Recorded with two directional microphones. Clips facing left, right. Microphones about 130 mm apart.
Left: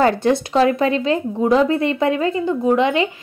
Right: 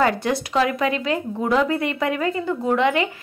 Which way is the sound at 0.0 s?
30° left (ahead or behind).